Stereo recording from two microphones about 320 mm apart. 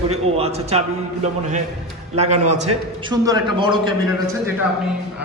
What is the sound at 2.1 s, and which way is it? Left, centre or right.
A man's voice, right.